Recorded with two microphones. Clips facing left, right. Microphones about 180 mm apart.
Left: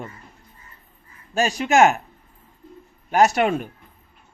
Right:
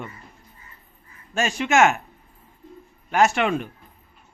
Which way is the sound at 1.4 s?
35° left (ahead or behind).